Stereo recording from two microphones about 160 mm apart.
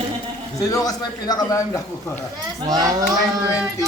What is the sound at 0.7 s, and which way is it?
A man's voice, 25° left (ahead or behind).